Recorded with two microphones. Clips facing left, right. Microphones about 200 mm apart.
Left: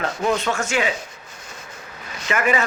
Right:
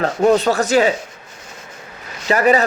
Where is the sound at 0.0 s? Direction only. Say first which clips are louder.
Right 8 dB; 40° right (ahead or behind).